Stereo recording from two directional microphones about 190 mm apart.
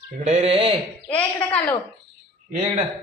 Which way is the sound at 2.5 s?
35° right (ahead or behind).